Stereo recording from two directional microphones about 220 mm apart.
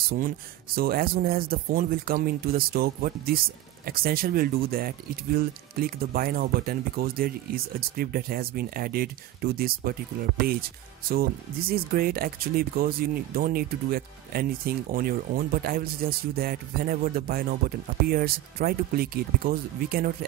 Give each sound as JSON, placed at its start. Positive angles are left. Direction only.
{"t": 0.7, "sound": "speech", "side_deg": -45}